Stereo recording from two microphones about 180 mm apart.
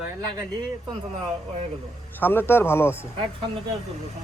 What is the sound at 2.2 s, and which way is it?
Speech, 10° left (ahead or behind).